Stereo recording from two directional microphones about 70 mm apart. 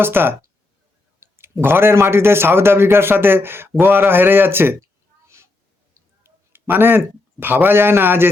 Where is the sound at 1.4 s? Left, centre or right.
Right.